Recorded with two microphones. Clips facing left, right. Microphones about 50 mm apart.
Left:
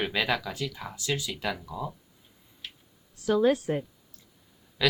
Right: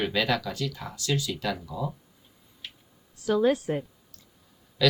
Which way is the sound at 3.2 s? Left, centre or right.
Centre.